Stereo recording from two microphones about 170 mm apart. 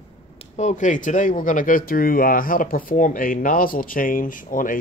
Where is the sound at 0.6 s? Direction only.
45° left (ahead or behind).